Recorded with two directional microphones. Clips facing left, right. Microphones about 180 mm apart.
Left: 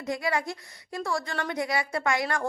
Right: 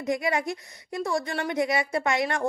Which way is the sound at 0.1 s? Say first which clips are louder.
Right 3 dB; 20° right (ahead or behind).